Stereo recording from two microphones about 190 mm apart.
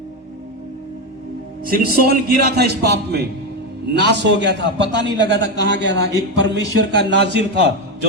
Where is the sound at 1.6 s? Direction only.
50° right (ahead or behind).